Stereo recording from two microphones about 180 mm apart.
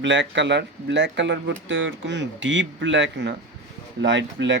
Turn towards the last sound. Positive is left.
turn(degrees=-90)